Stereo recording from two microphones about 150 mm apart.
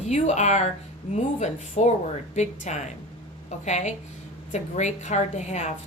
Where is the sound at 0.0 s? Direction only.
50° left (ahead or behind).